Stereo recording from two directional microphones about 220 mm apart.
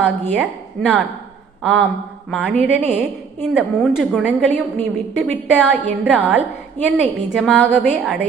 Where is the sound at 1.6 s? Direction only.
5° left (ahead or behind).